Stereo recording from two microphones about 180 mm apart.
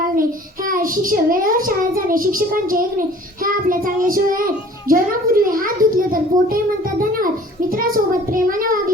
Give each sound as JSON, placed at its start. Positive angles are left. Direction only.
{"t": 0.2, "sound": "a child's voice", "side_deg": -50}